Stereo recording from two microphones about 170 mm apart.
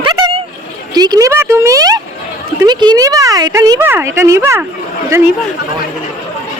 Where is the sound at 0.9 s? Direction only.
25° right (ahead or behind).